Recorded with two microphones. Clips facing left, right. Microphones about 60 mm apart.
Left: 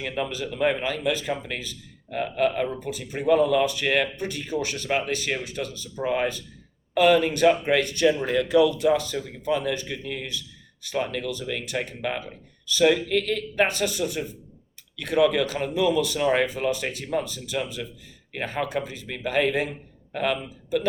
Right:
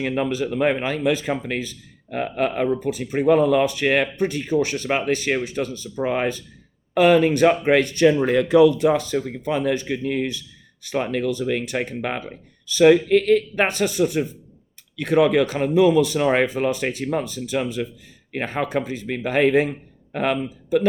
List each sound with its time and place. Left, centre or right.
0.2 s a man's voice: right